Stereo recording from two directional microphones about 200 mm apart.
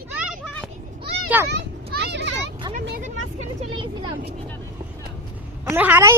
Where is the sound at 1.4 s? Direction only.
55° right (ahead or behind).